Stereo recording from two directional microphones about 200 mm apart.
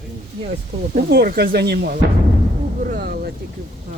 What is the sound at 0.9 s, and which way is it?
Speech, 45° right (ahead or behind).